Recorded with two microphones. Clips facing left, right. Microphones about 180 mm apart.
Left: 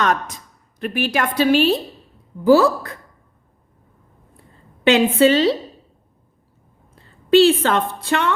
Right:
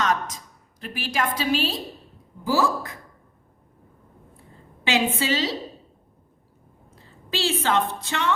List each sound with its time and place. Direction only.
0.0 s a woman's voice: 60° left (ahead or behind)
4.8 s a woman's voice: 60° left (ahead or behind)
6.9 s a woman's voice: 60° left (ahead or behind)